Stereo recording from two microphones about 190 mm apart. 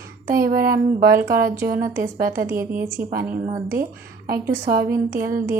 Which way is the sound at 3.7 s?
50° right (ahead or behind).